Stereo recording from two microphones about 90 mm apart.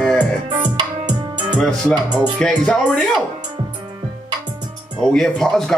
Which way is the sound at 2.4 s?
10° left (ahead or behind).